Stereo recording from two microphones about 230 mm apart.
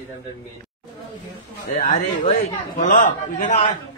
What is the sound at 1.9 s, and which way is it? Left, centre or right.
A man's voice, left.